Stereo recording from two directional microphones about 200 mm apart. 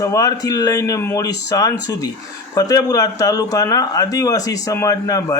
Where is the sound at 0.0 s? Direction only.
15° left (ahead or behind).